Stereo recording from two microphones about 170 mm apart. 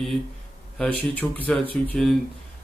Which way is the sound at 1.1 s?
10° left (ahead or behind).